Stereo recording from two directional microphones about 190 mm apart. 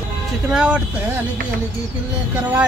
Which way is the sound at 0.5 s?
5° right (ahead or behind).